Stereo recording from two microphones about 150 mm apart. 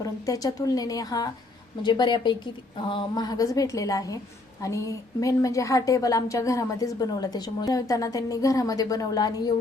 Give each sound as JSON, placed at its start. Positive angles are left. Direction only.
{"t": 0.0, "sound": "a woman's voice", "side_deg": 25}